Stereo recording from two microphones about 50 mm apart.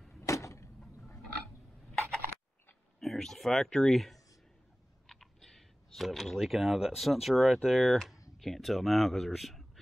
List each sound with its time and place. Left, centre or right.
0.3 s vehicle: left
3.0 s speech: centre
5.0 s clicking: centre
6.0 s speech: centre